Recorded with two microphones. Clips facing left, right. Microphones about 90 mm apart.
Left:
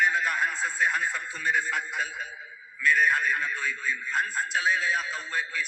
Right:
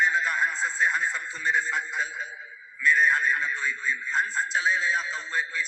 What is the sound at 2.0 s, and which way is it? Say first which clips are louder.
Speech: right 1 dB; 55° left (ahead or behind).